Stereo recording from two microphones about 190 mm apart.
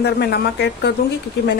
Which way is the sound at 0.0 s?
60° left (ahead or behind).